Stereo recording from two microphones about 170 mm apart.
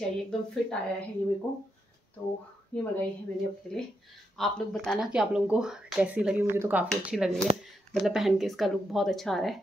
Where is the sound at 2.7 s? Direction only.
10° left (ahead or behind).